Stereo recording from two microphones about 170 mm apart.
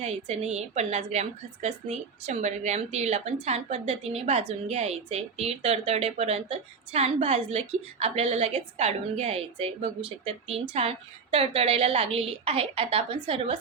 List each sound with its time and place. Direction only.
0.0 s a woman's voice: 45° right (ahead or behind)